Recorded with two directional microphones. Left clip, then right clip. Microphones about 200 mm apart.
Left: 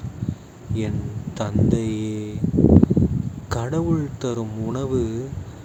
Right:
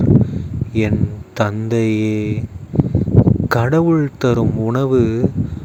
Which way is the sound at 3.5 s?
35° right (ahead or behind).